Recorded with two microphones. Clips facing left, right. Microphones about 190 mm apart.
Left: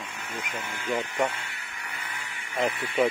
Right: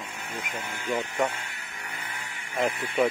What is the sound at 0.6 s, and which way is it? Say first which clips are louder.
Speech: even; 15° right (ahead or behind).